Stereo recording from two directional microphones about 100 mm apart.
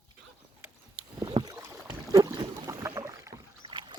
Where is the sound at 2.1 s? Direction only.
35° right (ahead or behind).